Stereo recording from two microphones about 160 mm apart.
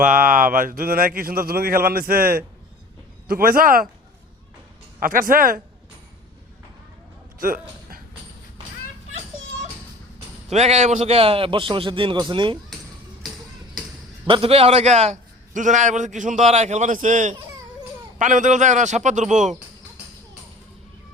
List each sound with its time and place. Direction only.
0.0 s a man's voice: 60° right (ahead or behind)
4.9 s a man's voice: 60° right (ahead or behind)
7.3 s speech: 60° right (ahead or behind)
10.5 s a man's voice: 45° right (ahead or behind)
14.3 s a man's voice: 35° right (ahead or behind); by 19.5 s 50° right (ahead or behind)